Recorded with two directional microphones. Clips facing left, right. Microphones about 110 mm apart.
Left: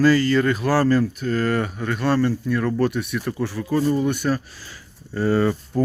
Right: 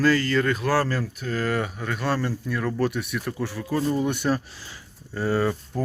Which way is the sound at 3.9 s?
15° right (ahead or behind).